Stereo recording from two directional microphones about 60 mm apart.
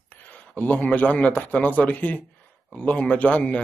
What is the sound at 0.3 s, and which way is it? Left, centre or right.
A man's voice, left.